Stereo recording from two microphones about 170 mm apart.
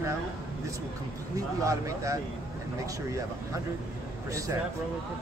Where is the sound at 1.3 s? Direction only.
20° right (ahead or behind).